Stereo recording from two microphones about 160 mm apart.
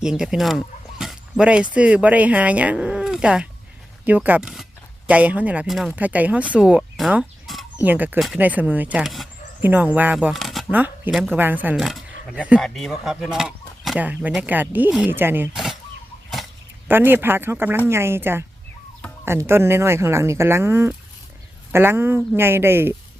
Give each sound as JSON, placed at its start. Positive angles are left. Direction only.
{"t": 0.0, "sound": "speech", "side_deg": -5}
{"t": 10.7, "sound": "speech", "side_deg": -10}
{"t": 15.5, "sound": "a sound", "side_deg": 0}
{"t": 16.9, "sound": "speech", "side_deg": -15}